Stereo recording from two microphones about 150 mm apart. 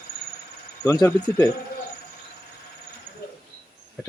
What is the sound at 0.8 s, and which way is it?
Speech, 20° left (ahead or behind).